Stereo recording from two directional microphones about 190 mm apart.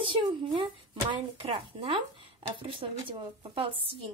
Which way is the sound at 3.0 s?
30° right (ahead or behind).